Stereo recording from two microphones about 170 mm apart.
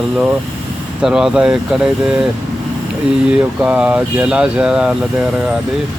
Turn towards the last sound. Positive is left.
turn(degrees=-5)  # may be behind; listen again after turning